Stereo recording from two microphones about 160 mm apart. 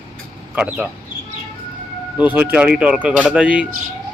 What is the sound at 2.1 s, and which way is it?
Speech, 10° right (ahead or behind).